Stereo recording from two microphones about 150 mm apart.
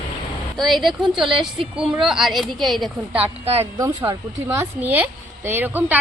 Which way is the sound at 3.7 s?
15° right (ahead or behind).